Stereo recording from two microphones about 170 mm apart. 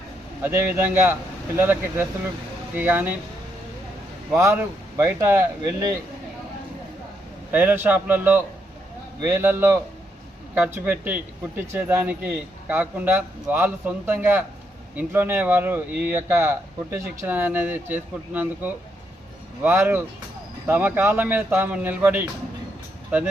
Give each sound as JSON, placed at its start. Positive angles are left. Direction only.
{"t": 0.4, "sound": "speech", "side_deg": -10}
{"t": 4.3, "sound": "speech", "side_deg": -15}
{"t": 7.5, "sound": "speech", "side_deg": -10}